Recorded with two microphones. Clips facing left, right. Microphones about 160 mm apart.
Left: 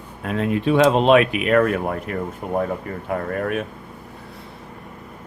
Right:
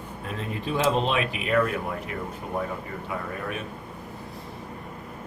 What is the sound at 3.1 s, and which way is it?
Speech, 55° left (ahead or behind).